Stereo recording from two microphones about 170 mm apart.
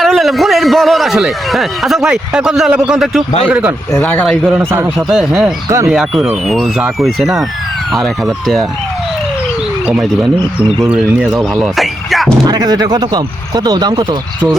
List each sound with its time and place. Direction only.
0.0 s a man's voice: centre (ahead or behind)
5.6 s speech: 15° right (ahead or behind)
5.9 s a man's voice: centre (ahead or behind)
9.8 s speech: centre (ahead or behind)
11.3 s speech: centre (ahead or behind)
12.5 s speech: 25° right (ahead or behind)